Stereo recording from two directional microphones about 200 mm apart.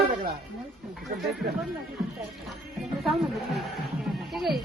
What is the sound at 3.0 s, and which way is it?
Music, centre (ahead or behind).